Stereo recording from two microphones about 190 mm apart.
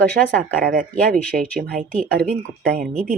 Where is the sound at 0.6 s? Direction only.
45° right (ahead or behind).